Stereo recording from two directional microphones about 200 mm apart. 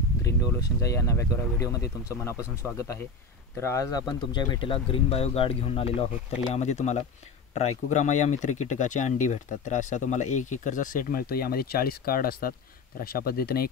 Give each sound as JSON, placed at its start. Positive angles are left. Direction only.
{"t": 0.2, "sound": "speech", "side_deg": 15}
{"t": 3.5, "sound": "speech", "side_deg": 15}